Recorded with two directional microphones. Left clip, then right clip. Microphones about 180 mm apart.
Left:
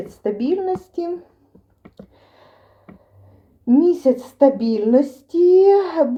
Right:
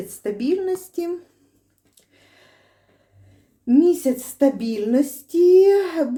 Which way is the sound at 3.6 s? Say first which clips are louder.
Left 2 dB; 20° right (ahead or behind).